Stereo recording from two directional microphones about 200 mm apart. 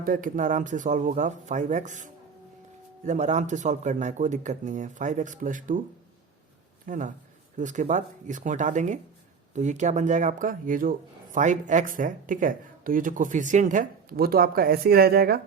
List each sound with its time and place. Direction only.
0.0 s speech: 40° right (ahead or behind)
6.8 s speech: 40° right (ahead or behind)